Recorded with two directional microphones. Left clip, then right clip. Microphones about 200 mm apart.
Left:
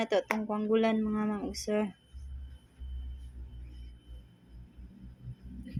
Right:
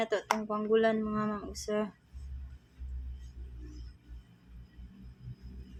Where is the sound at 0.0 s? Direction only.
20° left (ahead or behind).